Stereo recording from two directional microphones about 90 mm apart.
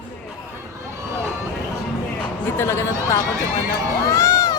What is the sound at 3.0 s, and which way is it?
Run, 35° left (ahead or behind).